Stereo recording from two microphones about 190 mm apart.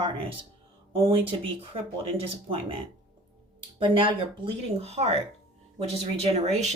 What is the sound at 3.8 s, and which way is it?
Speech, 25° right (ahead or behind).